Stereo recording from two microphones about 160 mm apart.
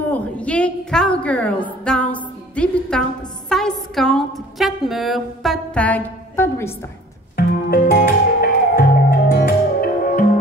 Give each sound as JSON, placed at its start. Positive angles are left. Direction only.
{"t": 0.1, "sound": "a woman's voice", "side_deg": 10}
{"t": 7.3, "sound": "music", "side_deg": 70}